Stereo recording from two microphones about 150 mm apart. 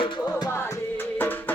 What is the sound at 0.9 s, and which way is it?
Music, 15° left (ahead or behind).